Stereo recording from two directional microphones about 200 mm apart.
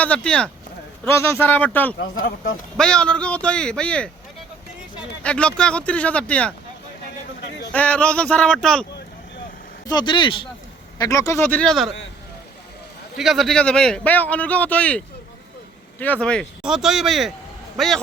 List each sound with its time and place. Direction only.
0.0 s a man's voice: 5° left (ahead or behind)
5.2 s speech: 5° left (ahead or behind)
7.7 s speech: 5° left (ahead or behind)
9.8 s a man's voice: 20° left (ahead or behind); by 11.9 s centre (ahead or behind)
13.1 s a man's voice: centre (ahead or behind)